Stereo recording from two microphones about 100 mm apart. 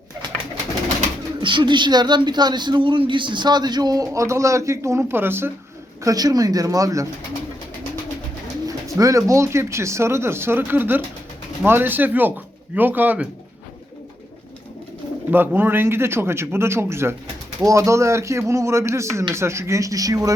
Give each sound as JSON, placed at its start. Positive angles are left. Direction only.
{"t": 1.4, "sound": "speech", "side_deg": -55}
{"t": 6.0, "sound": "speech", "side_deg": -35}
{"t": 8.6, "sound": "speech", "side_deg": -35}
{"t": 15.3, "sound": "speech", "side_deg": -20}